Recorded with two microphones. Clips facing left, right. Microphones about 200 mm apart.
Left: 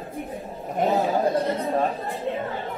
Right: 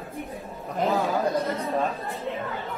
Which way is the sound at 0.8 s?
25° left (ahead or behind).